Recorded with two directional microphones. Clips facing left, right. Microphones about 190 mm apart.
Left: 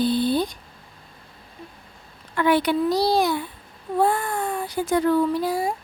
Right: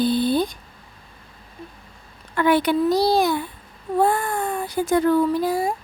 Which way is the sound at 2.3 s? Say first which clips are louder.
Right 1 dB; 50° right (ahead or behind).